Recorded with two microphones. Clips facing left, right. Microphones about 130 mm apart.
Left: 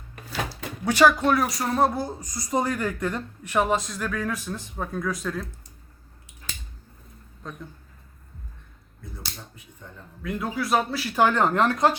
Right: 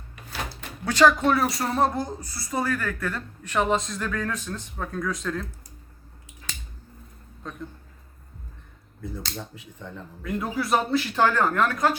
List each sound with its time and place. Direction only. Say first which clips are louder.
0.9 s speech: even; 10° left (ahead or behind)
1.2 s speech: even; centre (ahead or behind)
10.2 s speech: even; centre (ahead or behind)
11.2 s speech: left 3 dB; 20° left (ahead or behind)